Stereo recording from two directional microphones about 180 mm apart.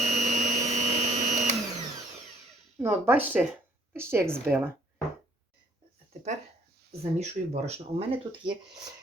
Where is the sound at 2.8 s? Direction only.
10° right (ahead or behind).